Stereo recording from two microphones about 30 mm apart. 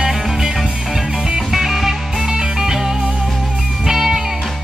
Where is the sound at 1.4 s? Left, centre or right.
Centre.